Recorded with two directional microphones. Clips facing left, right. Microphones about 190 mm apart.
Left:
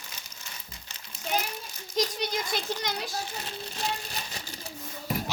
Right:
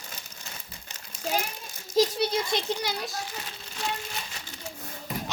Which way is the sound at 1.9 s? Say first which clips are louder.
Right 6 dB; 30° right (ahead or behind).